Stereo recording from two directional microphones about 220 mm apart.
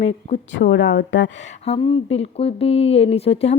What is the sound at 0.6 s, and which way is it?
Speech, 50° left (ahead or behind).